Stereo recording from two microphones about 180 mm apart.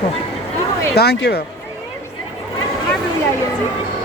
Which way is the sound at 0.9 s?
65° left (ahead or behind).